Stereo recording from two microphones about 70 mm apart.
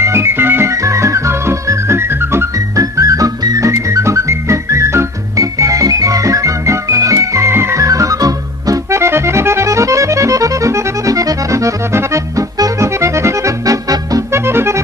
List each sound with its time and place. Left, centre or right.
0.0 s organ: right
0.7 s music: right
2.7 s music: right
8.9 s accordion: right
12.8 s accordion: right
13.9 s music: right
14.3 s accordion: right